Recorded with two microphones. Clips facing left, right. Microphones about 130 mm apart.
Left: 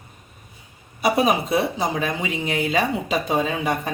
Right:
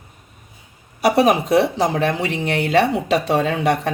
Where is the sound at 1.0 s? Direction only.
75° right (ahead or behind).